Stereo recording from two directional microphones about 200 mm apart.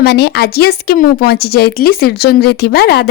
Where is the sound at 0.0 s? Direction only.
55° left (ahead or behind).